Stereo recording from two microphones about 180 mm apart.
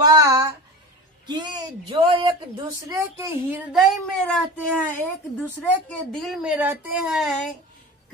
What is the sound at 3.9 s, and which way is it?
Speech, centre (ahead or behind).